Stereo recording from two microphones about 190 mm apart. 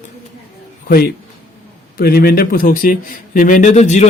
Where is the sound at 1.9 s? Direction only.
55° left (ahead or behind); by 4.1 s 40° left (ahead or behind).